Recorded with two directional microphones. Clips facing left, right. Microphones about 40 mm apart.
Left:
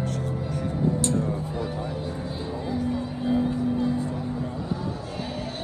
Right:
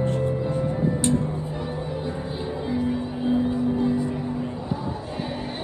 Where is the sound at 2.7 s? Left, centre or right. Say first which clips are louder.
Right 2 dB; right.